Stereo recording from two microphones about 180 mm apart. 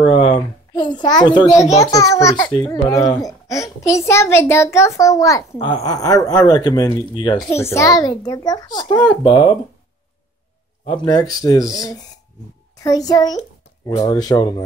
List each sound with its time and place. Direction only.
0.0 s a child's voice: 30° left (ahead or behind)
10.9 s a child's voice: 20° left (ahead or behind)